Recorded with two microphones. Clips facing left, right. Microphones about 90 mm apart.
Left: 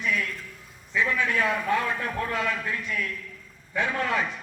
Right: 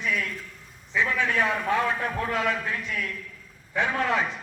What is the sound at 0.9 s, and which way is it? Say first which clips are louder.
A man's voice: even; 15° right (ahead or behind).